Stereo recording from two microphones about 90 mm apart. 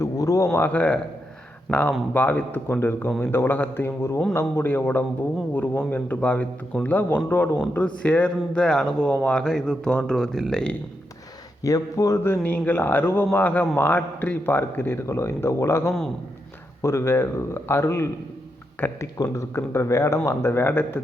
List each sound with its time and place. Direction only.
0.0 s a sound: 35° left (ahead or behind)
0.5 s speech: 20° left (ahead or behind)
1.7 s speech: 5° right (ahead or behind)
2.1 s speech: 20° left (ahead or behind)
11.6 s speech: 40° left (ahead or behind)
12.2 s speech: 20° left (ahead or behind)